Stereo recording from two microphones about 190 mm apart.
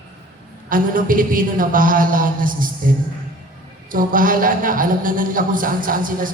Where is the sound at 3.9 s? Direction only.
45° right (ahead or behind).